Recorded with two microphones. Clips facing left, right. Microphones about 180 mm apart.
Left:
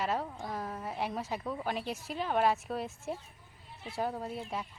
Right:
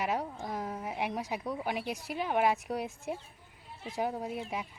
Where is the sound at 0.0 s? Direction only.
15° right (ahead or behind).